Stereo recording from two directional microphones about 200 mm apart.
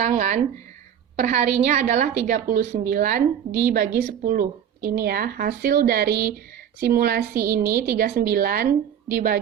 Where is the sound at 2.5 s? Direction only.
50° right (ahead or behind).